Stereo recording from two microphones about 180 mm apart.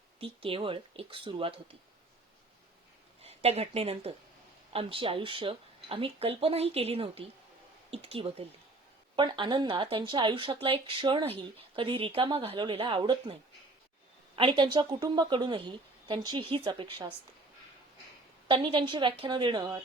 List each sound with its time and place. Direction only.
0.2 s speech: 30° right (ahead or behind)
3.2 s speech: 35° right (ahead or behind)
14.3 s speech: 25° right (ahead or behind)
18.4 s speech: 25° right (ahead or behind)